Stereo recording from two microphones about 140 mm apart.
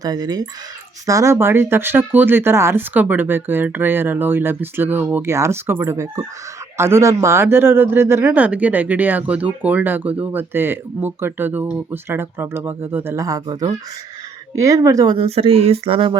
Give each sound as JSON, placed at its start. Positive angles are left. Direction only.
{"t": 0.0, "sound": "speech", "side_deg": -25}
{"t": 15.1, "sound": "speech", "side_deg": -45}